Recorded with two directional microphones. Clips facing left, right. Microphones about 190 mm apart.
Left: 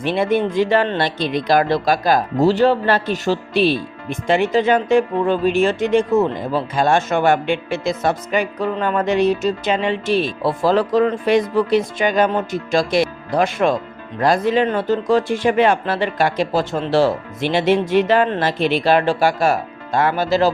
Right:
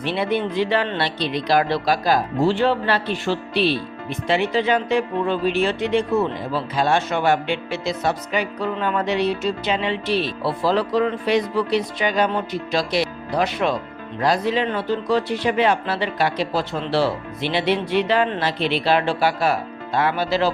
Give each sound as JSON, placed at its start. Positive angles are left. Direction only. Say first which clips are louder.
{"t": 0.0, "sound": "speech", "louder": "left 4 dB", "side_deg": 45}